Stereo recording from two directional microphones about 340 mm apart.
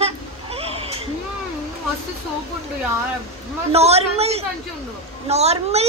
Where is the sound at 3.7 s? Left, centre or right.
Centre.